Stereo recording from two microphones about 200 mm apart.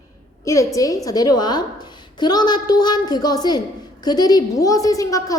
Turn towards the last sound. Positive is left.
turn(degrees=15)  # may be behind; listen again after turning